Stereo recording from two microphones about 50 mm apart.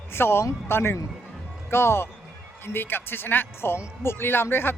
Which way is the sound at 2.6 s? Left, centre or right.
Left.